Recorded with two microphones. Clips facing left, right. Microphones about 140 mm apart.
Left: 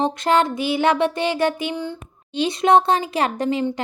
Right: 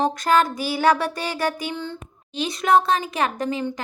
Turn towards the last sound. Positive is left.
turn(degrees=30)  # may be behind; listen again after turning